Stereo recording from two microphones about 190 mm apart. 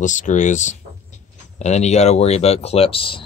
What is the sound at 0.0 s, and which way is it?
Speech, 40° left (ahead or behind).